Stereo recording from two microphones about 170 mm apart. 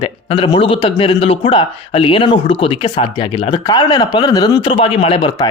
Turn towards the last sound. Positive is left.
turn(degrees=30)  # may be behind; listen again after turning